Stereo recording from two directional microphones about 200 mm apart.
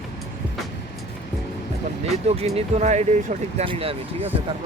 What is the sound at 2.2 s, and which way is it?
Speech, 30° right (ahead or behind).